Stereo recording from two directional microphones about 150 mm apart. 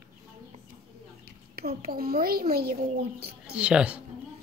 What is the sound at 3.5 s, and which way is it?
Speech, 5° right (ahead or behind).